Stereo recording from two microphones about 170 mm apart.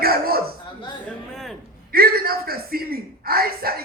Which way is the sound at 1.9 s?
60° right (ahead or behind).